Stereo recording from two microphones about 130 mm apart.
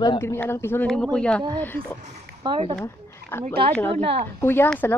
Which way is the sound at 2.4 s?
35° right (ahead or behind).